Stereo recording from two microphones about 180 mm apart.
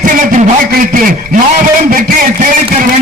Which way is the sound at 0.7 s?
50° right (ahead or behind).